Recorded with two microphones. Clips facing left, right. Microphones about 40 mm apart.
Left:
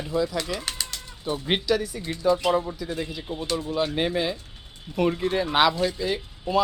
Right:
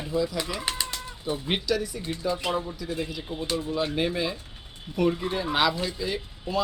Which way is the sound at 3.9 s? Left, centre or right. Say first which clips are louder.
Left 2 dB; left.